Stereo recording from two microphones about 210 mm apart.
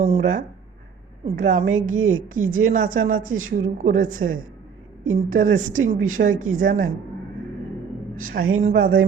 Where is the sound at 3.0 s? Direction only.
40° right (ahead or behind).